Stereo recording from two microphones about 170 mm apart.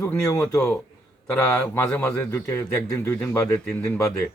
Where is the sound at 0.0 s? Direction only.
15° left (ahead or behind).